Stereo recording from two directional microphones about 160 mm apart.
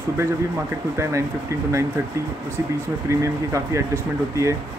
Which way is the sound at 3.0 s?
20° right (ahead or behind).